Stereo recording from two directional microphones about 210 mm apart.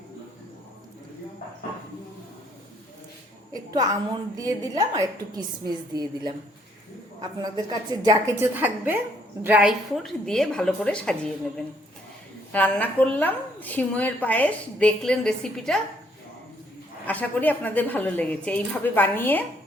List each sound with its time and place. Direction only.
3.5 s a woman's voice: 15° right (ahead or behind); by 15.8 s 5° left (ahead or behind)
17.1 s a woman's voice: 10° left (ahead or behind)